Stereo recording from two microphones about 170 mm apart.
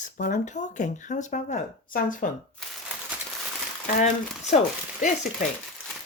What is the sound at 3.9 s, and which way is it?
Speech, 50° left (ahead or behind).